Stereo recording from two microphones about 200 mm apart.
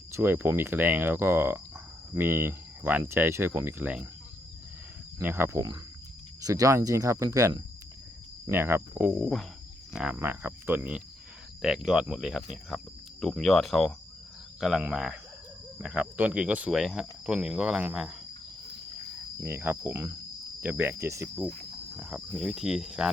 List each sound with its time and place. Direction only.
0.1 s speech: 10° right (ahead or behind)
5.2 s speech: 10° right (ahead or behind)
19.4 s speech: 10° right (ahead or behind)